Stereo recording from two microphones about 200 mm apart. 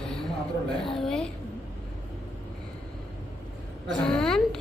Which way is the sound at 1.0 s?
Centre (ahead or behind).